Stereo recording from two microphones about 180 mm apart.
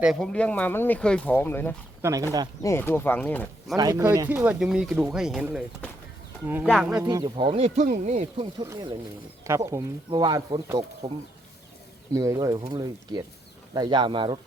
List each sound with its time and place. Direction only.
0.0 s speech: centre (ahead or behind)
2.0 s speech: 15° right (ahead or behind)
2.6 s speech: 15° left (ahead or behind)
3.8 s speech: 20° right (ahead or behind); by 5.6 s 5° right (ahead or behind)
6.7 s speech: centre (ahead or behind)
7.0 s speech: 20° right (ahead or behind)
8.6 s speech: 15° right (ahead or behind)